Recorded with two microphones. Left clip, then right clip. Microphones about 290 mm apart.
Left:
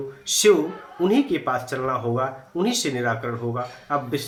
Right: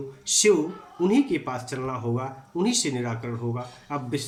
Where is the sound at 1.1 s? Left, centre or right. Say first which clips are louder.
Left 3 dB; centre.